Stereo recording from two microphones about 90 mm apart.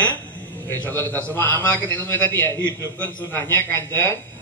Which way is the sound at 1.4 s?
25° left (ahead or behind).